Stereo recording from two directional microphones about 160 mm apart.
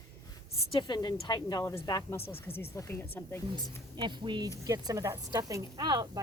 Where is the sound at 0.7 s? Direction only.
30° left (ahead or behind).